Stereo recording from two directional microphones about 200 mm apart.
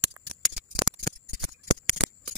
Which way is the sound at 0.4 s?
Centre (ahead or behind).